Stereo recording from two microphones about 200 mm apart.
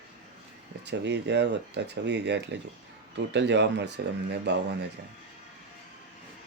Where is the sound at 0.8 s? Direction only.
60° right (ahead or behind).